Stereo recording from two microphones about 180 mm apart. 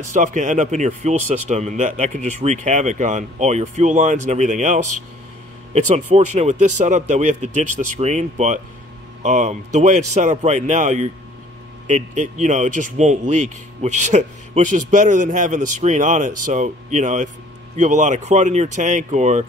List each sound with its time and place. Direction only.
0.1 s speech: 45° right (ahead or behind)